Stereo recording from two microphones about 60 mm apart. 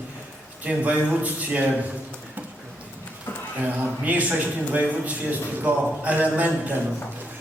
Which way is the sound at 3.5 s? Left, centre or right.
Right.